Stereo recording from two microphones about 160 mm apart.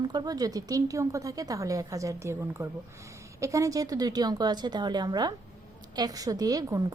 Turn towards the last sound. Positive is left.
turn(degrees=-25)  # may be behind; listen again after turning